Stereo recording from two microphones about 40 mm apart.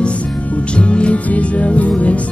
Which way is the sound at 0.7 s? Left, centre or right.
Left.